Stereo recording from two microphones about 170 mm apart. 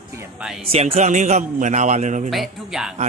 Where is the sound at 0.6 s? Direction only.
35° right (ahead or behind).